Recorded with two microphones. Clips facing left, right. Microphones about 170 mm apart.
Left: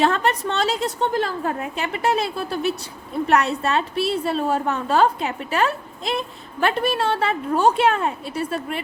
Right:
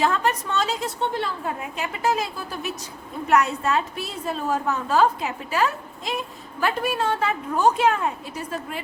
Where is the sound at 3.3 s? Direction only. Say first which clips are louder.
Even; 30° left (ahead or behind).